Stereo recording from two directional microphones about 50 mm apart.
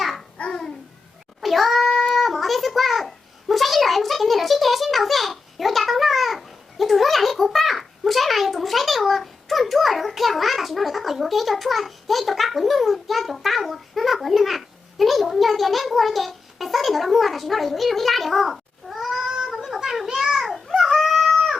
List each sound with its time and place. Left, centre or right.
0.0 s babbling: centre
0.3 s babbling: centre
1.4 s a sound: centre
2.1 s child singing: centre
3.5 s a child's voice: centre
19.3 s a sound: centre